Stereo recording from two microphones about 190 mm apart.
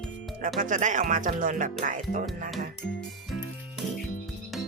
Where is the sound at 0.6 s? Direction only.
40° right (ahead or behind).